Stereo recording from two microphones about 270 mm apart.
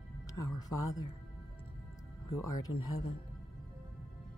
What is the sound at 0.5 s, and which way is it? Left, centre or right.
Speech, centre.